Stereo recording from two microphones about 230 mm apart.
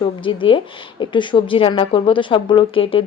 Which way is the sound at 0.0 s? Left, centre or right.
Left.